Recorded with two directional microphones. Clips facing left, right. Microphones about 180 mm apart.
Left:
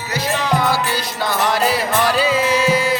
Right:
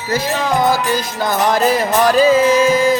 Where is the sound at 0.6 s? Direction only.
45° right (ahead or behind).